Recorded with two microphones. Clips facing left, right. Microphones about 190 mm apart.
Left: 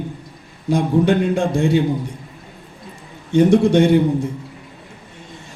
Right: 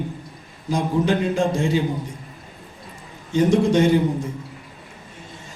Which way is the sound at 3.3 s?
65° left (ahead or behind).